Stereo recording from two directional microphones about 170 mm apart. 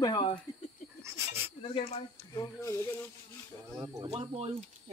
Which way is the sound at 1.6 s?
35° left (ahead or behind).